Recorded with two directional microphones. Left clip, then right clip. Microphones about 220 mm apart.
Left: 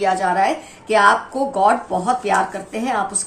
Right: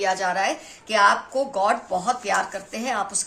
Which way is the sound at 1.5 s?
40° right (ahead or behind).